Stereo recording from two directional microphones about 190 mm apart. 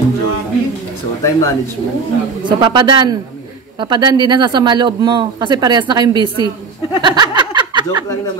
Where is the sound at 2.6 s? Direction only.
25° right (ahead or behind).